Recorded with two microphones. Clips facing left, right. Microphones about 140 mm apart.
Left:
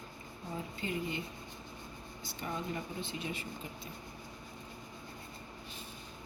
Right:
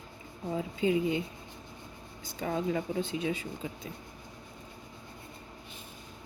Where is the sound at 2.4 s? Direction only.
90° right.